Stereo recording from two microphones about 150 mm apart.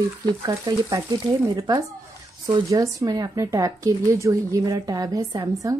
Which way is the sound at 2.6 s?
25° right (ahead or behind).